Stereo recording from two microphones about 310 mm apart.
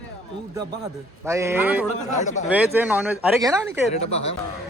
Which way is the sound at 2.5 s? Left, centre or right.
Centre.